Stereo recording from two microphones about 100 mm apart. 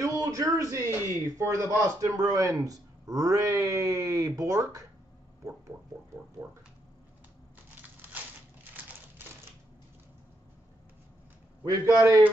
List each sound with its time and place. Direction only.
0.0 s a man's voice: 35° right (ahead or behind)
6.4 s a man's voice: 25° right (ahead or behind)
11.8 s a man's voice: 30° right (ahead or behind)